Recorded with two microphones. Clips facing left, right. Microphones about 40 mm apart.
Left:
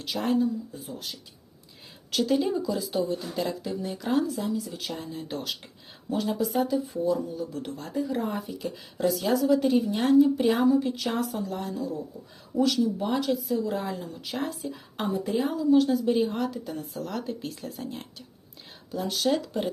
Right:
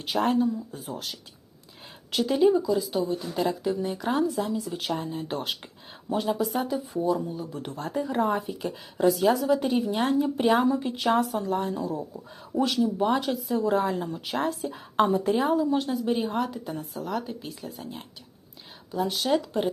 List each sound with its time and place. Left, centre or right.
0.0 s speech: right
2.1 s a woman's voice: centre
2.5 s speech: centre
3.3 s a woman's voice: centre
4.4 s speech: right
6.1 s a woman's voice: centre
7.7 s speech: right
8.3 s a woman's voice: right; by 10.0 s centre
10.3 s speech: right
10.6 s a woman's voice: centre
11.3 s speech: right
15.7 s a woman's voice: centre